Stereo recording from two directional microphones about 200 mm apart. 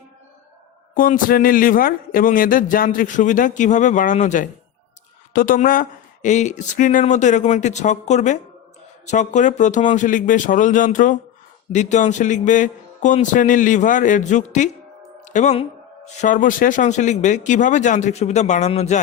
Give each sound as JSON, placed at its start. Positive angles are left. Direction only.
{"t": 0.9, "sound": "a woman's voice", "side_deg": 45}